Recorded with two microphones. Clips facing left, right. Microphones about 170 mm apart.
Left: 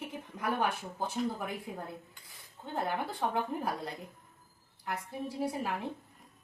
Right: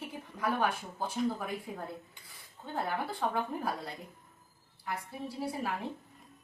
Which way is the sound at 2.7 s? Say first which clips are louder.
Left 1 dB; 20° left (ahead or behind).